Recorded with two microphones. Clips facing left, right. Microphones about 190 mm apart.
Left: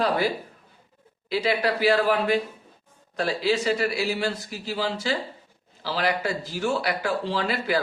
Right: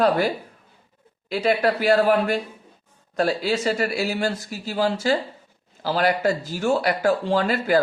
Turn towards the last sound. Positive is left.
turn(degrees=-45)  # may be behind; listen again after turning